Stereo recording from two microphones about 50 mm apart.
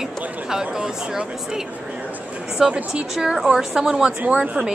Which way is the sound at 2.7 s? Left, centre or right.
Centre.